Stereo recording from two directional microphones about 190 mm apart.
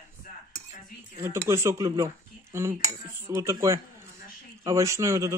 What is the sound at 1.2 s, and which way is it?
Speech, 15° right (ahead or behind).